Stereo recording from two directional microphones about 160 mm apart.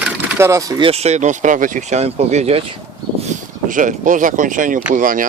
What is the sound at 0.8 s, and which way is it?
Speech, 40° right (ahead or behind).